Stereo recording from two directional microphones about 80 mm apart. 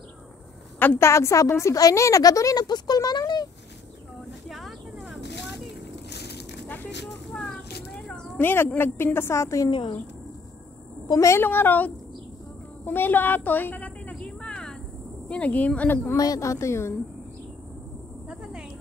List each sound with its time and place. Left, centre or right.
0.7 s a woman's voice: left
4.5 s a sound: centre
5.0 s vehicle: centre
7.1 s a sound: centre
8.4 s a woman's voice: left
9.7 s speech: left
11.1 s a woman's voice: left
11.3 s a woman's voice: left
12.8 s a sound: left
15.2 s speech: centre
15.9 s a woman's voice: left
16.2 s a woman's voice: left
18.3 s a sound: centre